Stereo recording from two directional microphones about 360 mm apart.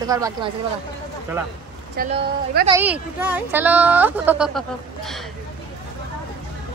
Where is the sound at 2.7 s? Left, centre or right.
Centre.